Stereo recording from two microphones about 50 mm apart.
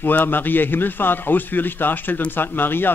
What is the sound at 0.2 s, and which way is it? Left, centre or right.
A man's voice, left.